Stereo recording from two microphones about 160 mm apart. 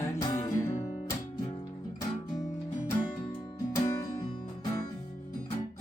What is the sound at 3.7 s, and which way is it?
Music, 20° left (ahead or behind).